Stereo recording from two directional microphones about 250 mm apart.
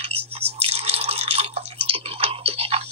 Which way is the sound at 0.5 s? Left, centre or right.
Right.